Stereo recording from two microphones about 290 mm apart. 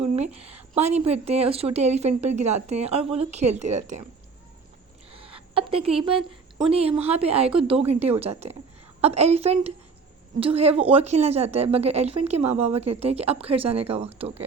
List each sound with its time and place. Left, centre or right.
0.2 s a woman's voice: right
5.1 s a sound: centre
6.0 s a woman's voice: centre